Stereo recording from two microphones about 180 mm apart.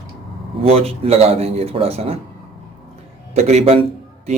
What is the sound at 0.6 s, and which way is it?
Speech, 35° right (ahead or behind).